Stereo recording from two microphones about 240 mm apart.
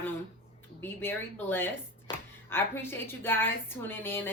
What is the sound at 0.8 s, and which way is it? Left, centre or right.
Speech, centre.